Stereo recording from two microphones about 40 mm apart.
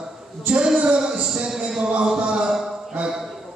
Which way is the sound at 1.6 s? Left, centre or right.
Centre.